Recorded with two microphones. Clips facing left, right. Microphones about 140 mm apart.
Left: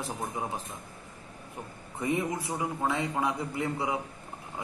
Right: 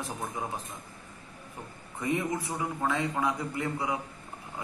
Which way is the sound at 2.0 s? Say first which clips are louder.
Even; 5° left (ahead or behind).